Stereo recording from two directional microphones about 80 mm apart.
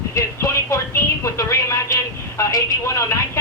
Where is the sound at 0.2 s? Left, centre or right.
Left.